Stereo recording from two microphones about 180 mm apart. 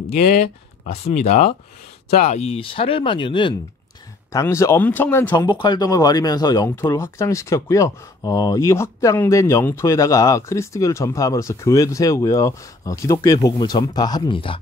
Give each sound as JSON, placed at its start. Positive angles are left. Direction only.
{"t": 0.8, "sound": "speech", "side_deg": 35}
{"t": 4.3, "sound": "speech", "side_deg": 15}
{"t": 5.3, "sound": "speech", "side_deg": 25}